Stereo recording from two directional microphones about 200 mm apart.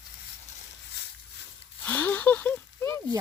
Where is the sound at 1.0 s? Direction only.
55° left (ahead or behind).